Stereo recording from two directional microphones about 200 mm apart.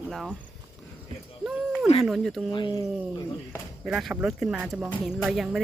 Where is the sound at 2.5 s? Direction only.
25° left (ahead or behind).